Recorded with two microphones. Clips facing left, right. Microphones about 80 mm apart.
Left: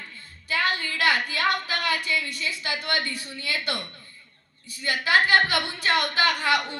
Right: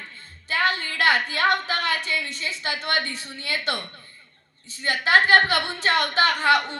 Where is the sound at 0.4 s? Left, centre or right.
Right.